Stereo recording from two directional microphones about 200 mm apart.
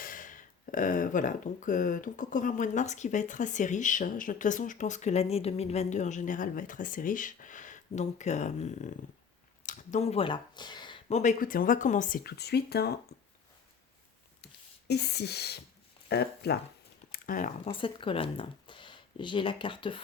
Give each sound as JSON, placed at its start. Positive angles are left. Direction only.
{"t": 0.0, "sound": "speech", "side_deg": 40}
{"t": 11.2, "sound": "speech", "side_deg": 40}
{"t": 14.4, "sound": "speech", "side_deg": 55}
{"t": 17.1, "sound": "a sound", "side_deg": 45}
{"t": 17.7, "sound": "speech", "side_deg": 25}